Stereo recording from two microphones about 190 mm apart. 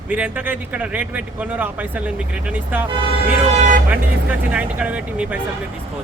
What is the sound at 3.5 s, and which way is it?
Vehicle, 35° right (ahead or behind).